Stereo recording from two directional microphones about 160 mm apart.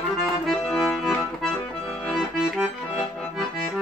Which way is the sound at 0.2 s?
5° left (ahead or behind).